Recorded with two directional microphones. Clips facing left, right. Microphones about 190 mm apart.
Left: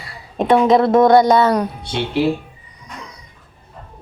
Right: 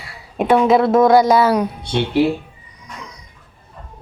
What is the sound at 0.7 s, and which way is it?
Speech, 5° right (ahead or behind).